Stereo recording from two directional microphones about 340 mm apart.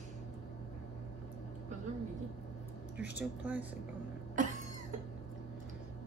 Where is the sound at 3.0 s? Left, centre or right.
Centre.